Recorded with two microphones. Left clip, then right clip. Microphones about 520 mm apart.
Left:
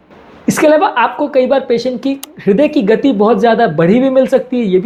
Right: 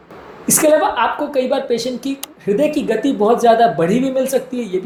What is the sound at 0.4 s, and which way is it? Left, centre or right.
Speech, left.